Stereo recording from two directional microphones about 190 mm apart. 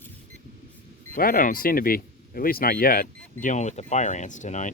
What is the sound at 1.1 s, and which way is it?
Speech, 50° left (ahead or behind).